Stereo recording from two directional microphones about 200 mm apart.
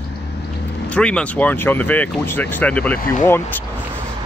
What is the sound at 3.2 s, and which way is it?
Speech, 10° left (ahead or behind).